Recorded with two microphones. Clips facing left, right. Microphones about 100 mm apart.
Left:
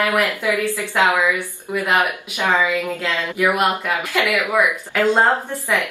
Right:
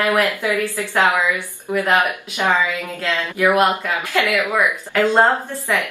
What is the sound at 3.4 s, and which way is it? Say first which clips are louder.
Speech: right 3 dB; 15° right (ahead or behind).